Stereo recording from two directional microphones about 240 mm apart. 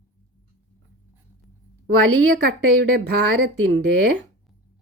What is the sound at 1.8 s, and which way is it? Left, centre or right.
Speech, right.